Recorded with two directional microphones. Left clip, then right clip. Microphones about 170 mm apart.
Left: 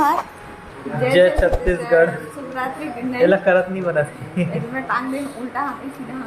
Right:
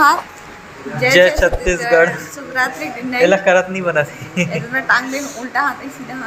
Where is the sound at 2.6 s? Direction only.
20° left (ahead or behind).